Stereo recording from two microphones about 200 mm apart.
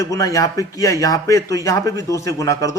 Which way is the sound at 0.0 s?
15° left (ahead or behind).